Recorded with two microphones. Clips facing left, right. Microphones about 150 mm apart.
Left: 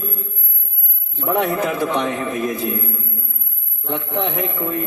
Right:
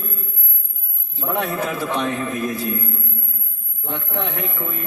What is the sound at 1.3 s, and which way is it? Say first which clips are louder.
A man's voice: left 4 dB; 20° left (ahead or behind).